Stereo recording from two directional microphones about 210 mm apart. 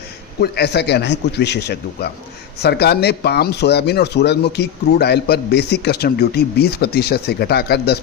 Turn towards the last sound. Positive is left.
turn(degrees=50)  # may be behind; listen again after turning